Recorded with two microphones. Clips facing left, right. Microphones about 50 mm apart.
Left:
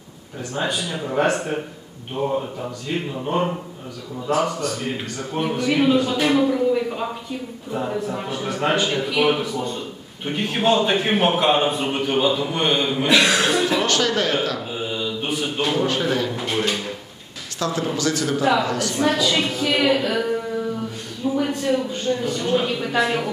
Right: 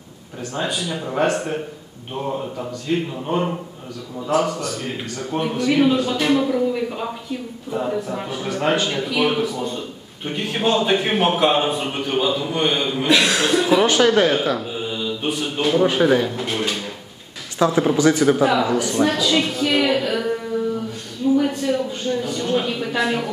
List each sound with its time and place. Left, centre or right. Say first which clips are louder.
0.6 s a man's voice: even; centre
2.9 s a man's voice: right 5 dB; centre
4.3 s a man's voice: right 1 dB; centre
13.7 s speech: right 5 dB; centre
14.7 s mantra: right 1 dB; centre
15.8 s speech: right 8 dB; centre
16.3 s a man's voice: left 1 dB; centre
17.6 s a man's voice: right 7 dB; centre
18.4 s speech: right 2 dB; centre
18.9 s a man's voice: even; centre
21.4 s a sound: right 1 dB; centre